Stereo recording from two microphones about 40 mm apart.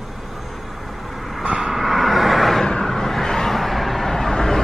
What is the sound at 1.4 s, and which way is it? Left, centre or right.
Vehicle, centre.